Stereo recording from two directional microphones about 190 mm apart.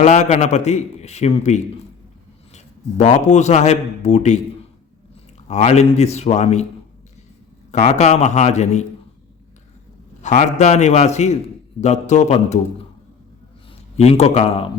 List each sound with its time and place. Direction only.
0.0 s a man's voice: 40° left (ahead or behind)
3.0 s a man's voice: 35° left (ahead or behind)
5.5 s a man's voice: 35° left (ahead or behind)
7.7 s a man's voice: 35° left (ahead or behind)
10.2 s a man's voice: 40° left (ahead or behind)
13.9 s a man's voice: 35° left (ahead or behind)